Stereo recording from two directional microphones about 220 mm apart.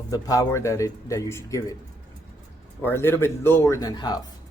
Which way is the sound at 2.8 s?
10° left (ahead or behind).